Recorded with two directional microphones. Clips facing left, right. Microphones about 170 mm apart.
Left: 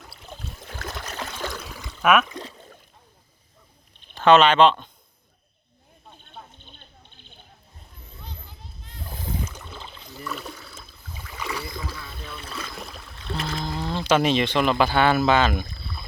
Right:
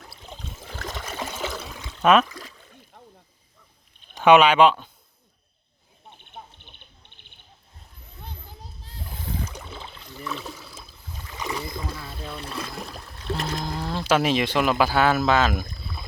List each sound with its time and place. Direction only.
0.0 s trickle: centre (ahead or behind)
2.0 s speech: 30° right (ahead or behind)
2.2 s a sound: 25° left (ahead or behind)
4.1 s speech: 15° right (ahead or behind)
6.3 s a sound: 15° right (ahead or behind)
9.6 s rowboat: 5° right (ahead or behind)
11.3 s boat: 20° right (ahead or behind)
11.8 s a sound: 30° right (ahead or behind)
12.9 s music: 45° right (ahead or behind)
13.7 s speech: 5° right (ahead or behind)